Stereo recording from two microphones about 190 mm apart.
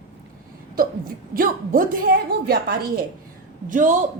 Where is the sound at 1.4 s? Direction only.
45° right (ahead or behind).